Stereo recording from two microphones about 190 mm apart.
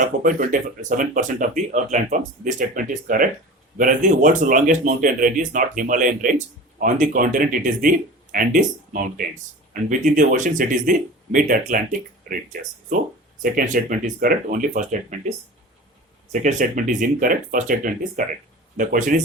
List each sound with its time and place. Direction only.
0.0 s speech: 45° right (ahead or behind)
13.4 s speech: 45° right (ahead or behind)
16.3 s speech: 40° right (ahead or behind)